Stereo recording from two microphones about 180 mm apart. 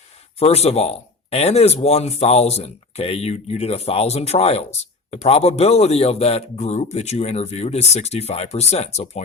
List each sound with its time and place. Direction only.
0.3 s speech: 35° left (ahead or behind)